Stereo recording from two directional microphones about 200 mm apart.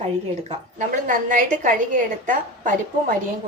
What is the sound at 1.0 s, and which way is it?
A woman's voice, 40° right (ahead or behind).